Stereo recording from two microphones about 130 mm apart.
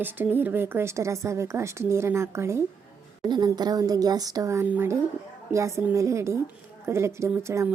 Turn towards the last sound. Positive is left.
turn(degrees=-20)  # may be behind; listen again after turning